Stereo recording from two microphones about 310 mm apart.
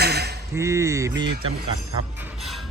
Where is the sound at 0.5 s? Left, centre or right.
Centre.